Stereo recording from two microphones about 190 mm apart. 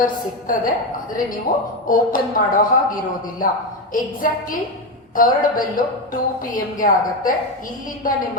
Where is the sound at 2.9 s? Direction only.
45° left (ahead or behind).